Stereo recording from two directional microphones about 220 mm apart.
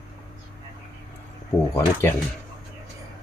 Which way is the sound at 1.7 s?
10° left (ahead or behind).